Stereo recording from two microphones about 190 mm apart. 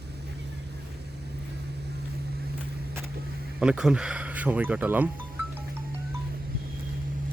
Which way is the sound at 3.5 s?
5° right (ahead or behind).